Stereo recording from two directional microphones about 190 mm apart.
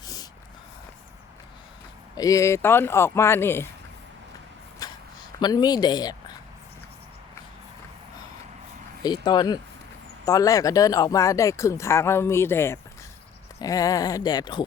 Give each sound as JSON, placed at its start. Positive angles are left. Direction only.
{"t": 2.1, "sound": "speech", "side_deg": 15}
{"t": 4.8, "sound": "a sound", "side_deg": 20}
{"t": 5.4, "sound": "speech", "side_deg": 20}
{"t": 9.0, "sound": "speech", "side_deg": 20}